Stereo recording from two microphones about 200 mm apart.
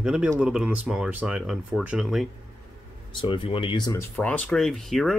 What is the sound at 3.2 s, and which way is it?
Speech, 25° left (ahead or behind).